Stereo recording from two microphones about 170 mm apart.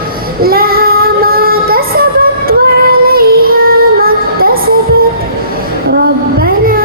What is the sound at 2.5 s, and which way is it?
Female singing, 60° right (ahead or behind).